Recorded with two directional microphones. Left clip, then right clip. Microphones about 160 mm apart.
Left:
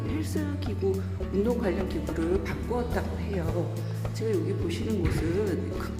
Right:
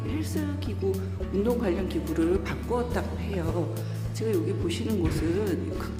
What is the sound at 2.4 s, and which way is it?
Speech, 15° right (ahead or behind).